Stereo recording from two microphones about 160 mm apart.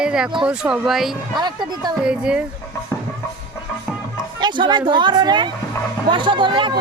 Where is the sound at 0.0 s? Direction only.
5° right (ahead or behind).